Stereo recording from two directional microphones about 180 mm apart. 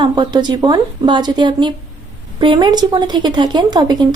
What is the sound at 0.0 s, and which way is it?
Speech, 25° right (ahead or behind).